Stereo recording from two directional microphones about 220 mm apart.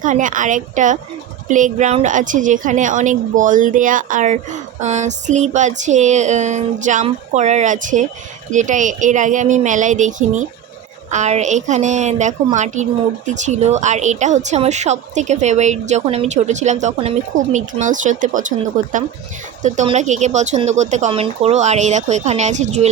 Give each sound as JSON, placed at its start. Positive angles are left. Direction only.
{"t": 0.0, "sound": "a woman's voice", "side_deg": -35}